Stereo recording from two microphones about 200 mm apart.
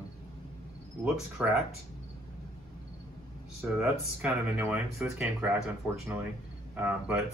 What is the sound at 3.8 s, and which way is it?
Speech, 5° right (ahead or behind).